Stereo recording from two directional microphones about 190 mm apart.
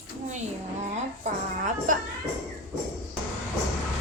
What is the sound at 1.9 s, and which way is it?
Music, 45° right (ahead or behind).